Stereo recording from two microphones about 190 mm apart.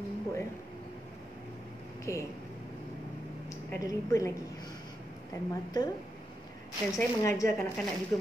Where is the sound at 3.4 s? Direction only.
15° left (ahead or behind).